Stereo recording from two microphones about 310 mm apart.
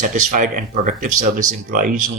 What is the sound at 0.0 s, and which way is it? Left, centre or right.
Speech, right.